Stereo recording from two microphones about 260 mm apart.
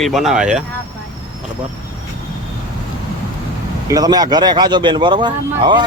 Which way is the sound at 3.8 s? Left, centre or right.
Centre.